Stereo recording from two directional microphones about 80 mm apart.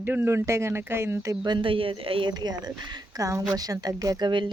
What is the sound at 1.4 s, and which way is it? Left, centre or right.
Speech, right.